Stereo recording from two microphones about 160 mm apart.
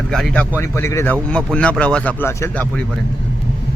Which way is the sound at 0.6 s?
15° left (ahead or behind).